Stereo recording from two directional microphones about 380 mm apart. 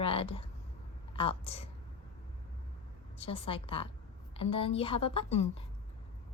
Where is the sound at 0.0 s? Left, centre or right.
Centre.